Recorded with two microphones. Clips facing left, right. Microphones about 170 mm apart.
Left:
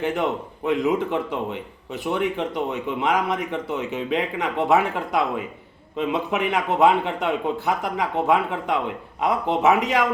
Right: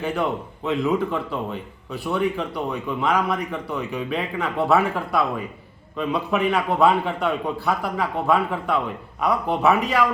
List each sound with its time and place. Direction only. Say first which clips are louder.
0.0 s a man's voice: left 1 dB; 20° left (ahead or behind)